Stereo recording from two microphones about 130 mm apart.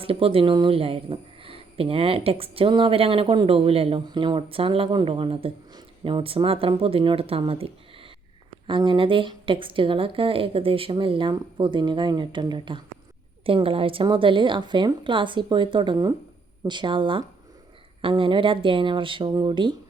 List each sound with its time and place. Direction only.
0.0 s a woman's voice: 45° right (ahead or behind)